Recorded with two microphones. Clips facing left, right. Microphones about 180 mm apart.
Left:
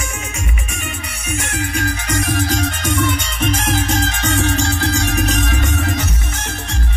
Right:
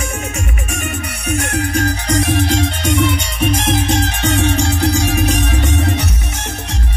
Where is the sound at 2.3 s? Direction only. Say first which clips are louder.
Right 3 dB; 20° right (ahead or behind).